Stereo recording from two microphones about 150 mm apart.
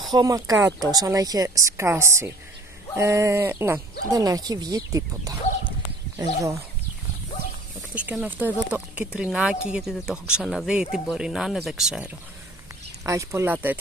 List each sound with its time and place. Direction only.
0.1 s a woman's voice: 25° right (ahead or behind)
7.9 s speech: 10° right (ahead or behind)
13.0 s a woman's voice: 20° right (ahead or behind)